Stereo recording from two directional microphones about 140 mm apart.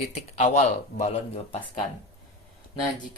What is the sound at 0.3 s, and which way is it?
Speech, 55° left (ahead or behind).